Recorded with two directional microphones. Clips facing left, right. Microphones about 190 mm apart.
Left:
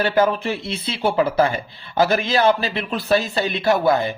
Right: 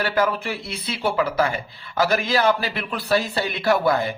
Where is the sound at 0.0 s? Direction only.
25° left (ahead or behind).